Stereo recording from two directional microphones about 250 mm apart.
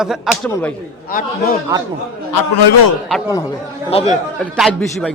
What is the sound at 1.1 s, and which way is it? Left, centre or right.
Speech, left.